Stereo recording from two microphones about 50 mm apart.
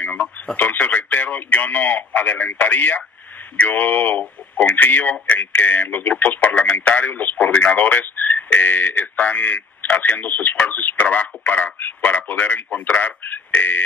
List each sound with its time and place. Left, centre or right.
0.0 s radio: left
0.6 s speech: left